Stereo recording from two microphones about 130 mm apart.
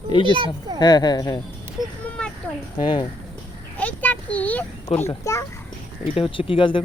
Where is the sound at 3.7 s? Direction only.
10° left (ahead or behind).